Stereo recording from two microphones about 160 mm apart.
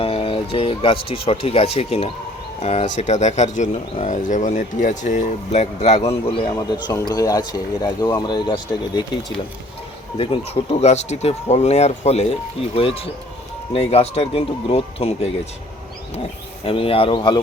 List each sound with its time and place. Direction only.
0.0 s speech: 35° left (ahead or behind)
10.2 s speech: 40° left (ahead or behind)
16.6 s speech: 35° left (ahead or behind)